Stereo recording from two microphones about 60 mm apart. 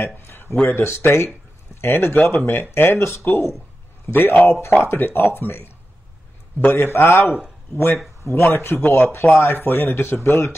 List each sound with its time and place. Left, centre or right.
0.0 s speech: left
6.7 s speech: left